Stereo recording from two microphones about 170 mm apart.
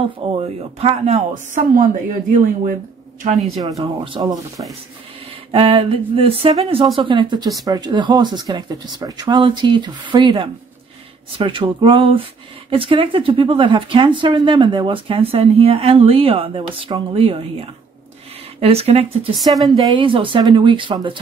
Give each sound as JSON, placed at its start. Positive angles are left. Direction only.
{"t": 0.2, "sound": "speech", "side_deg": -35}
{"t": 3.3, "sound": "speech", "side_deg": 0}
{"t": 3.6, "sound": "speech", "side_deg": -25}
{"t": 19.3, "sound": "speech", "side_deg": 0}
{"t": 19.7, "sound": "speech", "side_deg": -30}